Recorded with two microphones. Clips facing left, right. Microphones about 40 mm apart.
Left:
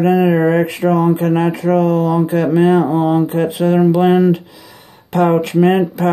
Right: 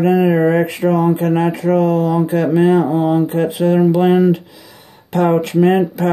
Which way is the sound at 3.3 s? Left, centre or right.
Centre.